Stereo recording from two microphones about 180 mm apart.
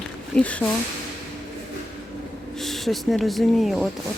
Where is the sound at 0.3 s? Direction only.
5° left (ahead or behind).